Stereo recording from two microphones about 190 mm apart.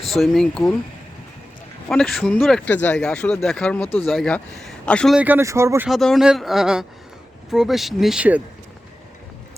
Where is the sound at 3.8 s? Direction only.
30° left (ahead or behind).